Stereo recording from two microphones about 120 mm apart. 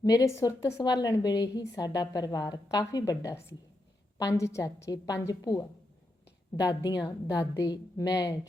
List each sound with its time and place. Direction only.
0.0 s a woman's voice: 30° left (ahead or behind)